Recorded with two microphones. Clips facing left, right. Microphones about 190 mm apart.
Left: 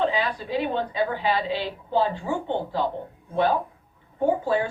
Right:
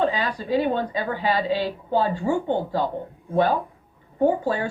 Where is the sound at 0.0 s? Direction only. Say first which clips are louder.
Right 1 dB; 45° right (ahead or behind).